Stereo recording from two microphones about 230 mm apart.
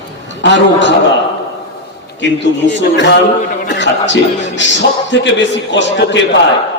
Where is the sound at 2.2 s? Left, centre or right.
Left.